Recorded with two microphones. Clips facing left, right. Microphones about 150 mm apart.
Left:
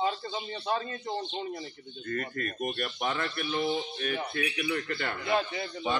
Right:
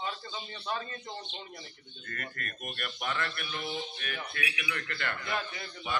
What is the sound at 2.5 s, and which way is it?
A man's voice, 40° left (ahead or behind).